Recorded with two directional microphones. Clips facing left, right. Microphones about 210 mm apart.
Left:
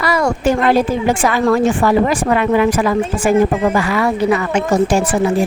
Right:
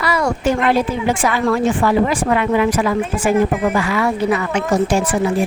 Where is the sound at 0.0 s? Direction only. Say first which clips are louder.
Left 2 dB; 45° left (ahead or behind).